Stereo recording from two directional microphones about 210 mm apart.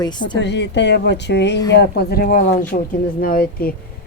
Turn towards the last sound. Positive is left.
turn(degrees=45)  # may be behind; listen again after turning